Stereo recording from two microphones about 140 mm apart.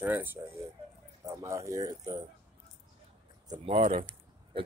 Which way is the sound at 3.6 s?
45° right (ahead or behind).